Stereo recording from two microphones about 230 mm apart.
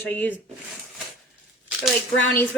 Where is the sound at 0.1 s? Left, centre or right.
Centre.